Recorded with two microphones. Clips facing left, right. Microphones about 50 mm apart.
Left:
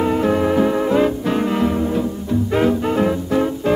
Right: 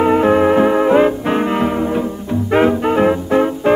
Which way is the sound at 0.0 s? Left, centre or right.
Right.